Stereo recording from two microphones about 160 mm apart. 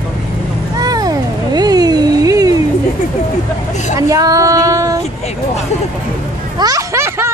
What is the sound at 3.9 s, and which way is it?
Speech, 20° right (ahead or behind).